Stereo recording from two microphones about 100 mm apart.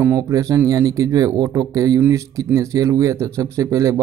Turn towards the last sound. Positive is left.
turn(degrees=-30)  # may be behind; listen again after turning